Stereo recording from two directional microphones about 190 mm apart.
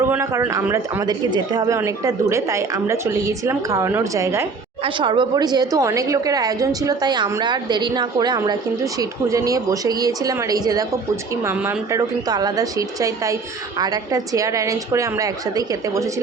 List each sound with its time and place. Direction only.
0.0 s a woman's voice: 15° right (ahead or behind)